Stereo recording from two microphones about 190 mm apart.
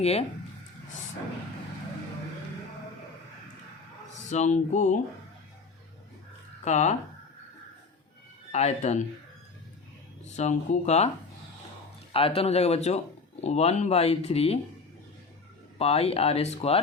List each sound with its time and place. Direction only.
0.0 s speech: 35° left (ahead or behind)
4.3 s speech: 40° left (ahead or behind)
6.7 s speech: 35° left (ahead or behind)
8.5 s speech: 35° left (ahead or behind)
10.2 s speech: 35° left (ahead or behind)
12.1 s speech: 30° left (ahead or behind)
15.8 s speech: 30° left (ahead or behind)